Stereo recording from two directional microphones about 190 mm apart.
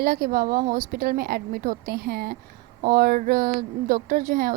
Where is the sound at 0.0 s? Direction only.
50° right (ahead or behind).